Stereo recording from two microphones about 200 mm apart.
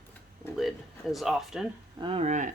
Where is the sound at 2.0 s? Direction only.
30° right (ahead or behind).